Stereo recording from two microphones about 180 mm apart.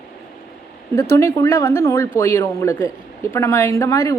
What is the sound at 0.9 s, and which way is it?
A woman's voice, 15° left (ahead or behind).